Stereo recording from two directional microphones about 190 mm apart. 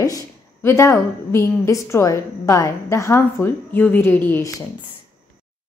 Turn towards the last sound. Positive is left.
turn(degrees=10)  # may be behind; listen again after turning